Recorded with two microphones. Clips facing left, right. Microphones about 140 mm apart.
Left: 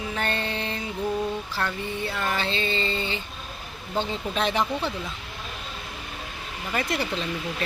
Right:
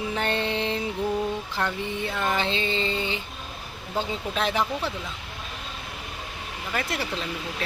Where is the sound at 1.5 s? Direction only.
20° right (ahead or behind).